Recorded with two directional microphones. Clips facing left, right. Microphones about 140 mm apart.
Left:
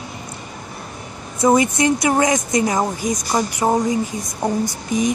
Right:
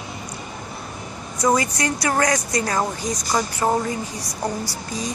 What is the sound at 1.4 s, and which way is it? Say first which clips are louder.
Speech: left 5 dB; 25° left (ahead or behind).